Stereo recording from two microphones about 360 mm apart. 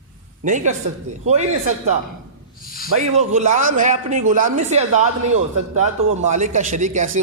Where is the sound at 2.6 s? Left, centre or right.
Left.